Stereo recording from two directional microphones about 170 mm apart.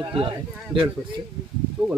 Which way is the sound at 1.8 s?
5° right (ahead or behind).